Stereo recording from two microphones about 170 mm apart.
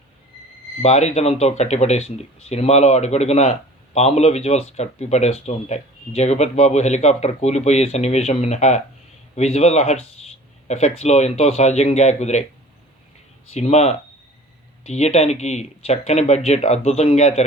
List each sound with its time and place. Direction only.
0.8 s speech: 40° left (ahead or behind)
13.5 s speech: 40° left (ahead or behind)